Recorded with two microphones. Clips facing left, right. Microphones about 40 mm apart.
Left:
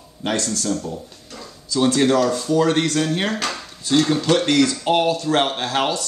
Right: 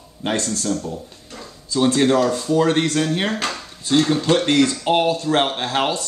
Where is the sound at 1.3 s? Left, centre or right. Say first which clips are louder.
Even; centre.